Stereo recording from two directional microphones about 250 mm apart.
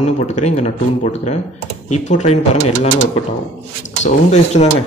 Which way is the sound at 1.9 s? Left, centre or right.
Left.